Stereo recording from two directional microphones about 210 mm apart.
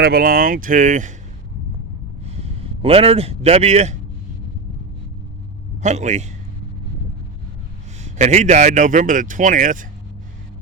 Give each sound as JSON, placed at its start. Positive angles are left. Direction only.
{"t": 0.0, "sound": "speech", "side_deg": -45}
{"t": 2.2, "sound": "a sound", "side_deg": -30}
{"t": 5.8, "sound": "speech", "side_deg": -35}
{"t": 8.0, "sound": "speech", "side_deg": -35}